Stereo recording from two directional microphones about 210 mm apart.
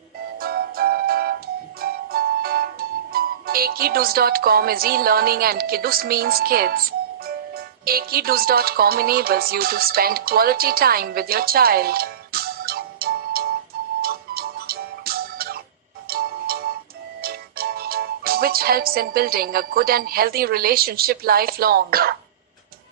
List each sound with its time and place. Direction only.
0.3 s music: 45° right (ahead or behind)
17.2 s speech: 45° right (ahead or behind)